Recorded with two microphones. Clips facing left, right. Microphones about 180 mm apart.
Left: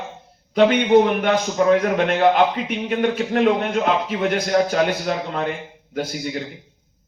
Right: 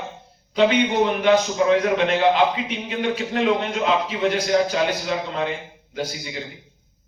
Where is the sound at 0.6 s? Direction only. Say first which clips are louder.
Left 4 dB; 55° left (ahead or behind).